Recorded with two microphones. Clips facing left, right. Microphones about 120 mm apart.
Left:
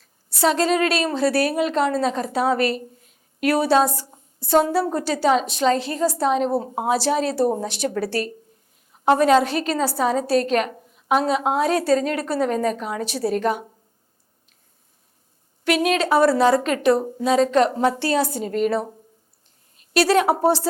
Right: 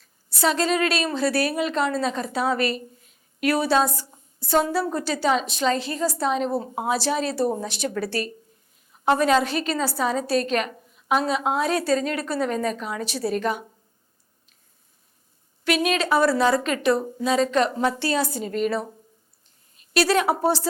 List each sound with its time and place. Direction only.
0.4 s a woman's voice: 50° left (ahead or behind); by 4.7 s 30° left (ahead or behind)
5.1 s a woman's voice: 50° left (ahead or behind)
7.4 s speech: 30° left (ahead or behind)
8.9 s a sound: 40° left (ahead or behind)
9.2 s a woman's voice: 50° left (ahead or behind)
9.8 s a woman's voice: 40° left (ahead or behind)
10.8 s a sound: 35° left (ahead or behind)
11.1 s a woman's voice: 50° left (ahead or behind)
15.6 s a woman's voice: 55° left (ahead or behind); by 17.1 s 35° left (ahead or behind)
17.2 s a woman's voice: 50° left (ahead or behind)
18.0 s a woman's voice: 50° left (ahead or behind)
18.3 s a woman's voice: 40° left (ahead or behind)
19.9 s a woman's voice: 55° left (ahead or behind)
20.3 s speech: 30° left (ahead or behind)